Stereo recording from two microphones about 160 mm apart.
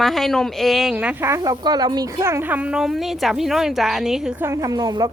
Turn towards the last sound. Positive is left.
turn(degrees=-25)  # may be behind; listen again after turning